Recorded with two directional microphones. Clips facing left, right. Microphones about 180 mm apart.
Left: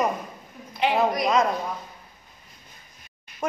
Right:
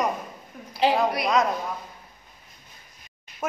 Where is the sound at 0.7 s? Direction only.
35° right (ahead or behind).